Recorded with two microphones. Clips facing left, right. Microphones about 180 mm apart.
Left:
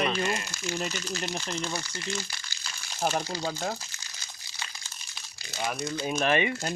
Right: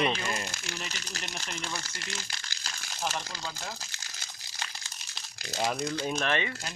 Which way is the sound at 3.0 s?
50° left (ahead or behind).